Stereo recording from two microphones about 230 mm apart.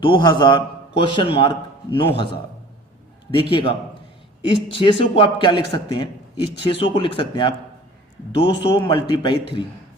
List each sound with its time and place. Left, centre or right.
0.0 s a man's voice: centre
3.5 s a man's voice: left
8.7 s a man's voice: centre